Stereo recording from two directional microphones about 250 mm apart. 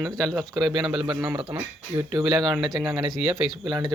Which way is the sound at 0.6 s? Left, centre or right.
Centre.